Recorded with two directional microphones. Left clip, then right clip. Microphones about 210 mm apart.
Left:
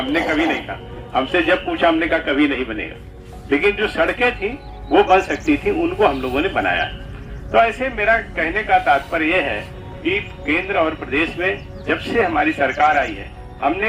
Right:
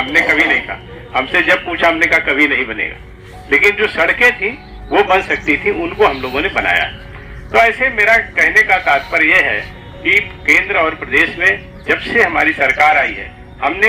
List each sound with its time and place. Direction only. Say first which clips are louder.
0.1 s a man's voice: right 7 dB; 55° left (ahead or behind)